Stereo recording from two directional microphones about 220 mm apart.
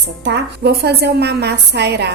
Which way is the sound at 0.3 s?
50° right (ahead or behind).